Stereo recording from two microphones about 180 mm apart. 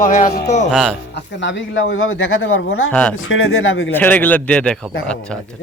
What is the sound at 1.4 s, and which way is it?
Speech, 90° left.